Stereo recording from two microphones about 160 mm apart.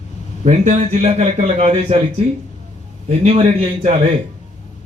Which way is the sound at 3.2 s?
40° right (ahead or behind).